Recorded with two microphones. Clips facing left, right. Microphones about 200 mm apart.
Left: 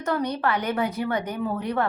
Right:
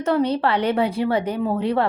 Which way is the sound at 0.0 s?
25° right (ahead or behind).